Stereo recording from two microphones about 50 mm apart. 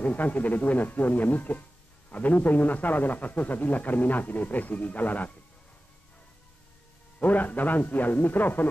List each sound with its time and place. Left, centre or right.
0.0 s a man's voice: left
7.2 s a man's voice: left